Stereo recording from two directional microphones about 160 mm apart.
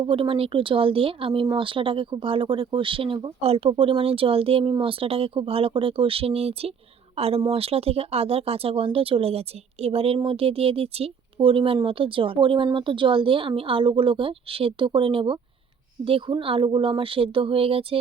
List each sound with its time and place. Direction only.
0.0 s speech: 35° right (ahead or behind)